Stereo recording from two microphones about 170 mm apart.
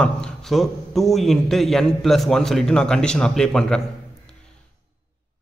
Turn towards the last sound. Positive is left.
turn(degrees=5)  # may be behind; listen again after turning